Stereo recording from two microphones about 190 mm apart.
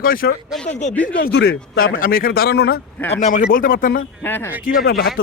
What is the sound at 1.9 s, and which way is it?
Speech, 50° left (ahead or behind).